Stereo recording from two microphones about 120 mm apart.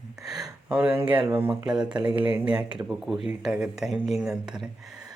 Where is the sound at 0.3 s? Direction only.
30° right (ahead or behind).